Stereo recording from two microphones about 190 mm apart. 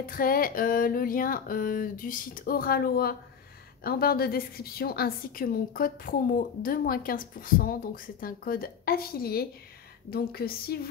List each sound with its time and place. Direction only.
0.0 s a woman's voice: 50° left (ahead or behind)